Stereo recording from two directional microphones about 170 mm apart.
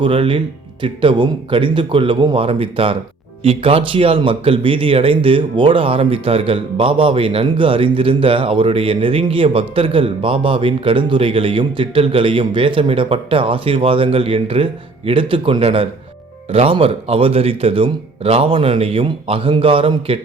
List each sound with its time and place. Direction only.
0.0 s speech: 30° right (ahead or behind)